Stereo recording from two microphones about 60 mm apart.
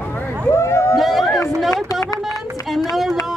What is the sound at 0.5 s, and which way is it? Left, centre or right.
Speech, left.